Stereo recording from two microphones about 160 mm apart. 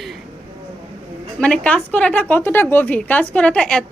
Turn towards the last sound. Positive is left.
turn(degrees=5)  # may be behind; listen again after turning